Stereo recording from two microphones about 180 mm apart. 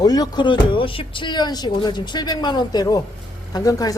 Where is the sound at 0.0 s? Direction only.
20° left (ahead or behind).